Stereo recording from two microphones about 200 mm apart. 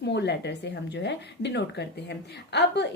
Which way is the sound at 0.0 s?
60° left (ahead or behind).